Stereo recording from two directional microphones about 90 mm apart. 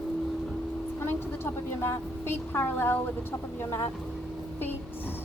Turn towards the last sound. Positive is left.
turn(degrees=30)  # may be behind; listen again after turning